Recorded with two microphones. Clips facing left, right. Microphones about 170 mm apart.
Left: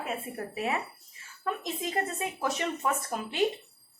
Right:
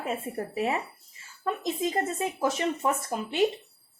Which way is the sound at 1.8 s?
25° right (ahead or behind).